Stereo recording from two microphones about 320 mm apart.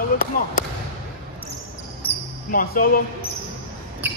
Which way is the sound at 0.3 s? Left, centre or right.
Left.